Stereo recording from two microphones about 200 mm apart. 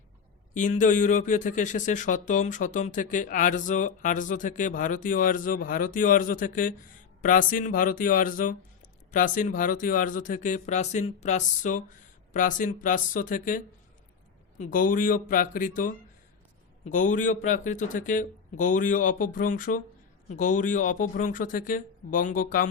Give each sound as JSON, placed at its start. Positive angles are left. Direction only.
{"t": 0.5, "sound": "speech", "side_deg": 40}
{"t": 14.6, "sound": "speech", "side_deg": 45}